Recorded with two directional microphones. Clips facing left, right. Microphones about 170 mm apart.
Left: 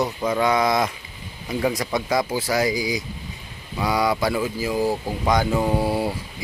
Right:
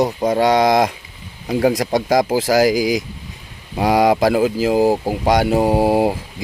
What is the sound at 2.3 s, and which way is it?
Speech, 90° right.